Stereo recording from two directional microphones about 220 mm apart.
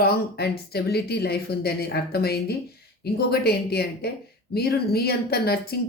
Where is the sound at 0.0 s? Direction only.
45° left (ahead or behind).